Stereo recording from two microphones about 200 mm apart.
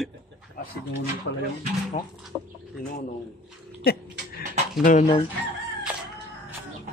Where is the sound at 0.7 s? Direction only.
55° left (ahead or behind).